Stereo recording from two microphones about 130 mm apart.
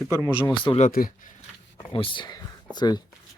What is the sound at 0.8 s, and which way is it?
Speech, 90° left.